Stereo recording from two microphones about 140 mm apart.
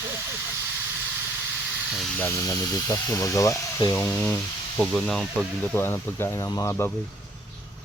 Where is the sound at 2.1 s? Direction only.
20° left (ahead or behind); by 5.5 s 5° left (ahead or behind).